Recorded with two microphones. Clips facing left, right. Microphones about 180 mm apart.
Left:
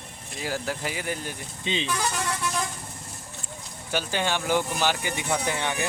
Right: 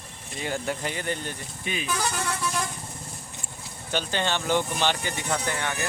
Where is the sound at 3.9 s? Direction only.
10° left (ahead or behind).